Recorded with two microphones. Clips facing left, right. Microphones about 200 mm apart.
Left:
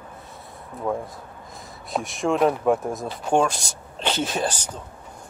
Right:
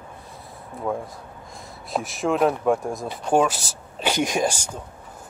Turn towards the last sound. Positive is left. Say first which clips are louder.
# right 3 dB
turn(degrees=-10)  # may be behind; listen again after turning